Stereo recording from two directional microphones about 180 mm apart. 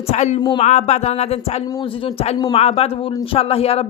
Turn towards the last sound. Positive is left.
turn(degrees=35)  # may be behind; listen again after turning